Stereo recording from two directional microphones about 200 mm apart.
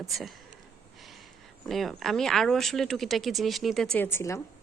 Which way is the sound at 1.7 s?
Centre (ahead or behind).